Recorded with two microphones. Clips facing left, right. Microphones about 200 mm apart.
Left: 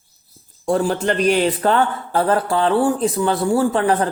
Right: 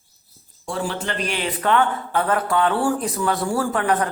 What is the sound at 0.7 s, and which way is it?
Speech, 40° left (ahead or behind).